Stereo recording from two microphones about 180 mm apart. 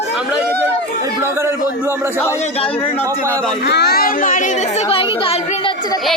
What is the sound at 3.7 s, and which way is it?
A child's voice, 65° left (ahead or behind).